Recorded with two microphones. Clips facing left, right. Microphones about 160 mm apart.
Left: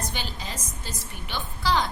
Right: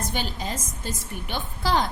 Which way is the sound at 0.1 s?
50° right (ahead or behind).